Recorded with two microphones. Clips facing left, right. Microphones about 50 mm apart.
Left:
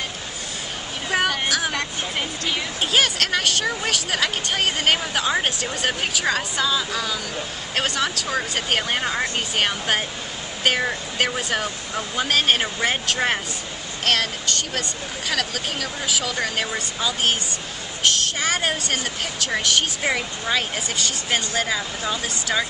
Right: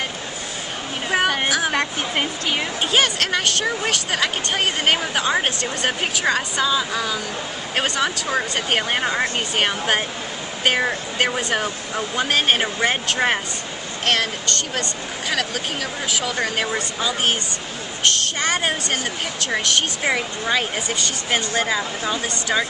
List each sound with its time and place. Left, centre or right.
1.1 s a sound: centre
1.5 s speech: centre
2.1 s speech: right
2.9 s speech: centre